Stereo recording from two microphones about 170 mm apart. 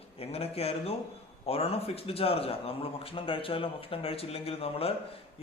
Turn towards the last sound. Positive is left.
turn(degrees=35)  # may be behind; listen again after turning